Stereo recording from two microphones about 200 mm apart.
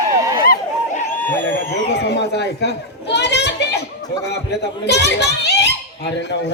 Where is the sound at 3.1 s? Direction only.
60° left (ahead or behind).